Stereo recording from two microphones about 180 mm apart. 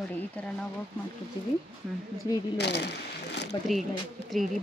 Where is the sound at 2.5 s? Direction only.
65° left (ahead or behind).